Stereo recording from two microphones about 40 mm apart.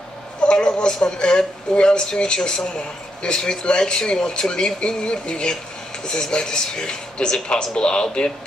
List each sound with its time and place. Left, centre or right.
0.4 s speech: left